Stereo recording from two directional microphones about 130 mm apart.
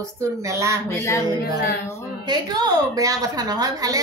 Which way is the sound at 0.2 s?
20° right (ahead or behind).